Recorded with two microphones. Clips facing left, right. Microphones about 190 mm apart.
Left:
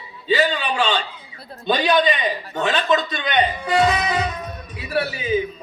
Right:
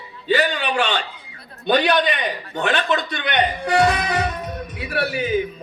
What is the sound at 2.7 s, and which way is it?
Music, 60° right (ahead or behind).